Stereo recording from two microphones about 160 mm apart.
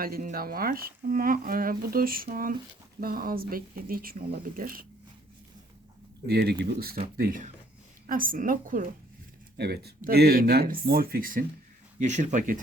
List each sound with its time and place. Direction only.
0.0 s speech: 60° right (ahead or behind)
6.2 s speech: 85° right
7.2 s speech: 60° right (ahead or behind)
9.6 s speech: 90° right; by 11.4 s 60° right (ahead or behind)
11.9 s speech: 45° right (ahead or behind)